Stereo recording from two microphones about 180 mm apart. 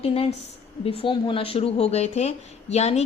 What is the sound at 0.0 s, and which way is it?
Speech, 35° left (ahead or behind).